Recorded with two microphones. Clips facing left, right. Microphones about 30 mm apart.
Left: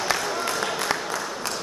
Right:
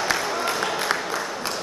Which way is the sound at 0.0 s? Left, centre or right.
Centre.